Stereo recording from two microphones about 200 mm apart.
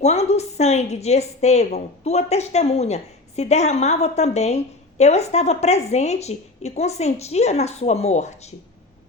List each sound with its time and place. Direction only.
0.0 s a woman's voice: 35° left (ahead or behind)